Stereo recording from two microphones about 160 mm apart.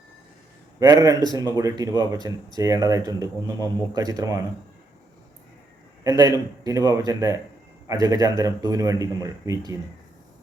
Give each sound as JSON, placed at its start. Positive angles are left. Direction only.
{"t": 0.8, "sound": "speech", "side_deg": -20}
{"t": 6.0, "sound": "speech", "side_deg": -20}